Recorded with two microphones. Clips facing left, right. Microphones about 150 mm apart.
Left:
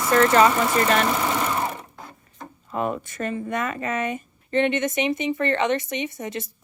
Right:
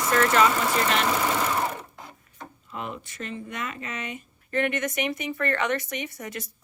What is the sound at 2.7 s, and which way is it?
Speech, 45° left (ahead or behind).